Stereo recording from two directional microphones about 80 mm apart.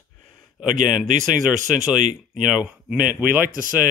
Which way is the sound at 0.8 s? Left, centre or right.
Centre.